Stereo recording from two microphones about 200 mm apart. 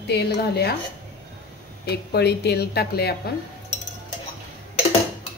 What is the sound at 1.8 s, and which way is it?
A woman's voice, 55° left (ahead or behind).